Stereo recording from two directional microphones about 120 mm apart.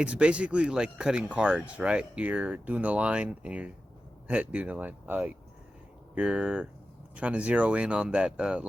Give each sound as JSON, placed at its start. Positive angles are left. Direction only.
{"t": 0.0, "sound": "speech", "side_deg": -10}